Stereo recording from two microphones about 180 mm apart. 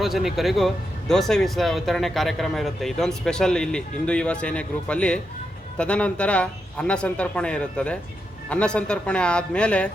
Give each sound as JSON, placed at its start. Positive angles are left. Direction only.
{"t": 0.0, "sound": "a man's voice", "side_deg": 0}